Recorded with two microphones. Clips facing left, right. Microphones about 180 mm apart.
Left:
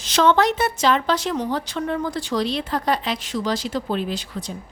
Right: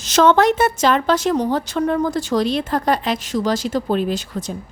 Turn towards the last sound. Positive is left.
turn(degrees=-45)  # may be behind; listen again after turning